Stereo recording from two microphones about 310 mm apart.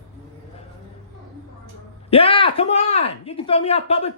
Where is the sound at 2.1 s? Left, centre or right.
Centre.